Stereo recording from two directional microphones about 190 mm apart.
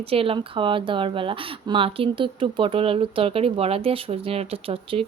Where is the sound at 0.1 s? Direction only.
30° right (ahead or behind).